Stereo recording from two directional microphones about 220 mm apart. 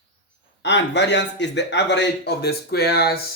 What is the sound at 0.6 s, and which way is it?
Speech, 50° left (ahead or behind).